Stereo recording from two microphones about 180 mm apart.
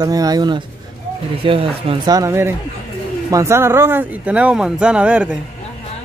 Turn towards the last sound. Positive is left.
turn(degrees=-10)  # may be behind; listen again after turning